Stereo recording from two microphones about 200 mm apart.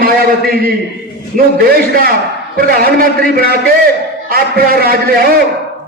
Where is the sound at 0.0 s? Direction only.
50° right (ahead or behind).